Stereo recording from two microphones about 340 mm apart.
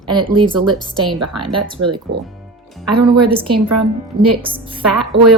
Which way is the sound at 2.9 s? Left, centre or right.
Right.